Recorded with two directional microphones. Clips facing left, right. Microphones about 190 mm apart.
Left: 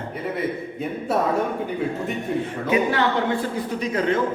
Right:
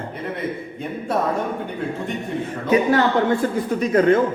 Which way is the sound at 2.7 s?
45° right (ahead or behind).